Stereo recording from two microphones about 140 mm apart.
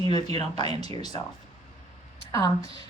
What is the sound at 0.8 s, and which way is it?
Speech, 30° left (ahead or behind).